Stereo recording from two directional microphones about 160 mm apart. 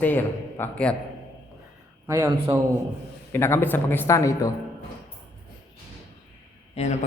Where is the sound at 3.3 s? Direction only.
15° left (ahead or behind).